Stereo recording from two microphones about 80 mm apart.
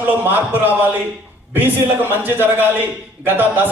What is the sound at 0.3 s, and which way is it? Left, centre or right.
A man's voice, right.